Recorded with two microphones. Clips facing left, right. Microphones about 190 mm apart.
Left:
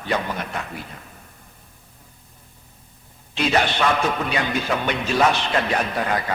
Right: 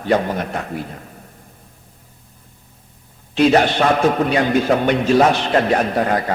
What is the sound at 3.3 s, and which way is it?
A man's voice, 45° right (ahead or behind).